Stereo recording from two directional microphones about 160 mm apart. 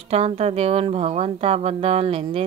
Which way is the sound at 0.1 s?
40° right (ahead or behind).